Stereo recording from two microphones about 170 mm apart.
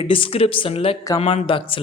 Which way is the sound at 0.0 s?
30° left (ahead or behind).